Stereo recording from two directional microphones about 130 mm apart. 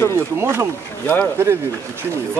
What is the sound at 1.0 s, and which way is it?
Speech, 15° left (ahead or behind).